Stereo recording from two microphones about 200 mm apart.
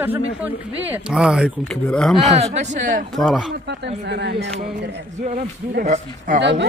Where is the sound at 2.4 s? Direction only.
35° right (ahead or behind).